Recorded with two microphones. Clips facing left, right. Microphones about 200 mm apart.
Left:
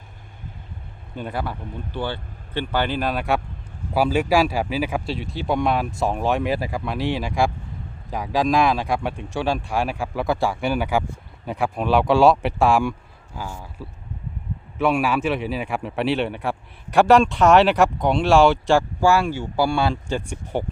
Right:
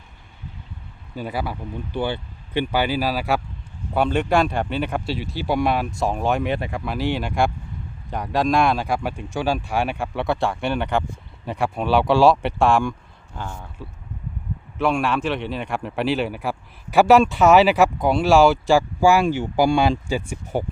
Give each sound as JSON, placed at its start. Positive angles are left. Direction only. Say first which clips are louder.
{"t": 1.1, "sound": "a man's voice", "louder": "right 1 dB", "side_deg": -5}